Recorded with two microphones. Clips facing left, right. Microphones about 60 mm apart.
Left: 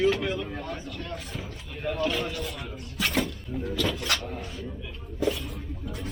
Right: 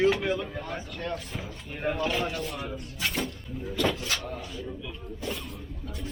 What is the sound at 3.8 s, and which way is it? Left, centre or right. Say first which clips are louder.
Speech: right 5 dB; centre.